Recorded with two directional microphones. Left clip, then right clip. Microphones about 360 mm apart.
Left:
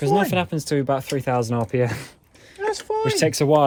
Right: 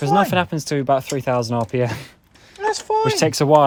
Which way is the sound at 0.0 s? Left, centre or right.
Centre.